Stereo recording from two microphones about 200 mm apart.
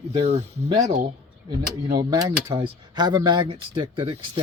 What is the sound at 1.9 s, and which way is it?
Speech, 20° right (ahead or behind).